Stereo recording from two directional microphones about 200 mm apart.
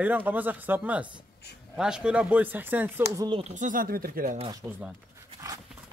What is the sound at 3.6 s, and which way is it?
Speech, 40° right (ahead or behind).